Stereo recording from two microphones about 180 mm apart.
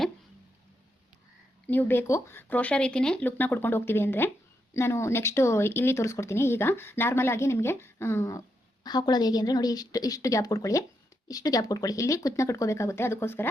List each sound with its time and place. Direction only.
1.6 s speech: 10° left (ahead or behind)